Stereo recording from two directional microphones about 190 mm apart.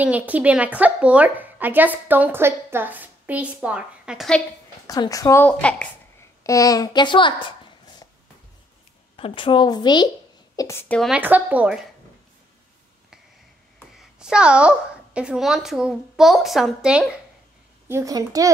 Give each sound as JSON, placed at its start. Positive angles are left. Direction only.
{"t": 0.0, "sound": "a woman's voice", "side_deg": -10}
{"t": 4.8, "sound": "a woman's voice", "side_deg": 20}
{"t": 6.4, "sound": "a child's voice", "side_deg": 15}
{"t": 9.1, "sound": "a child's voice", "side_deg": 30}
{"t": 11.0, "sound": "a woman's voice", "side_deg": -5}
{"t": 14.2, "sound": "a woman's voice", "side_deg": -5}
{"t": 17.8, "sound": "a woman's voice", "side_deg": -15}